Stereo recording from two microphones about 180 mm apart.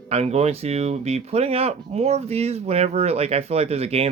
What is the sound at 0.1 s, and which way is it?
Speech, 35° right (ahead or behind).